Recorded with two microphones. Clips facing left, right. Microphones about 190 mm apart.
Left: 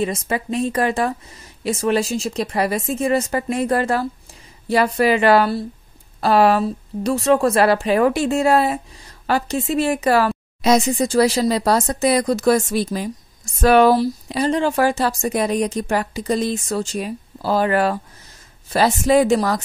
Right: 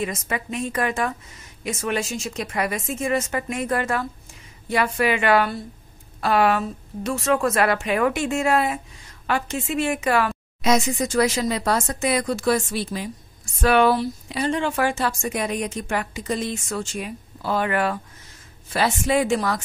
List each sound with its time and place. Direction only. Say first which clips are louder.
0.0 s speech: left 5 dB; 30° left (ahead or behind)